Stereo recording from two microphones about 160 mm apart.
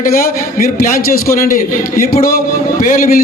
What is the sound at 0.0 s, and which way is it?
A man's voice, 65° left (ahead or behind).